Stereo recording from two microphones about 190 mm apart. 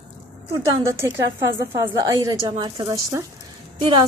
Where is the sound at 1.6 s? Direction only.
15° right (ahead or behind).